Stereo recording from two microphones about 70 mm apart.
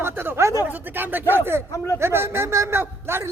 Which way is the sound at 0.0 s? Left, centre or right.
Right.